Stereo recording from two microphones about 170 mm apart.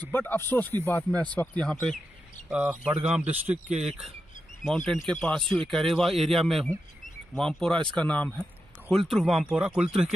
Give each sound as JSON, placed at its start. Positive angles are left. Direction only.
{"t": 0.0, "sound": "speech", "side_deg": 10}
{"t": 2.5, "sound": "speech", "side_deg": -5}
{"t": 3.6, "sound": "speech", "side_deg": -40}
{"t": 4.6, "sound": "speech", "side_deg": 0}